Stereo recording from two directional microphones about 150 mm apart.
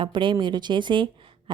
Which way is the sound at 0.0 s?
30° right (ahead or behind).